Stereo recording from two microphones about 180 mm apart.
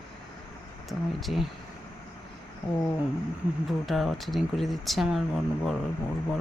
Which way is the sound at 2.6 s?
25° left (ahead or behind).